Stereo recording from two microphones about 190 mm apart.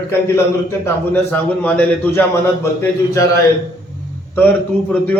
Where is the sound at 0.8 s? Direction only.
10° left (ahead or behind).